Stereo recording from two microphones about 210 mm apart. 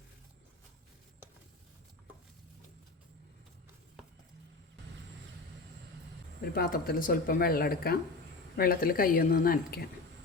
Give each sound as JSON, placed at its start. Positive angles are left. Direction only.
{"t": 6.4, "sound": "speech", "side_deg": 45}